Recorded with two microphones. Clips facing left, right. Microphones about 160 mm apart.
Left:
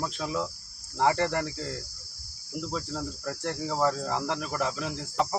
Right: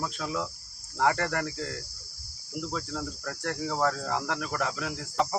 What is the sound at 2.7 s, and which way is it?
Cricket, 15° left (ahead or behind).